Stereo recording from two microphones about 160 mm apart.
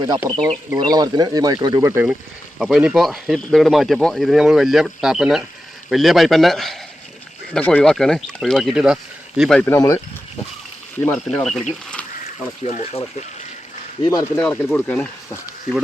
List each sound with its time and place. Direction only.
0.0 s speech: 25° right (ahead or behind)
2.6 s speech: 5° right (ahead or behind); by 10.0 s 15° left (ahead or behind)
11.0 s speech: 10° left (ahead or behind)
11.9 s a sound: 10° left (ahead or behind)
12.6 s speech: 40° left (ahead or behind)
14.0 s speech: 25° left (ahead or behind)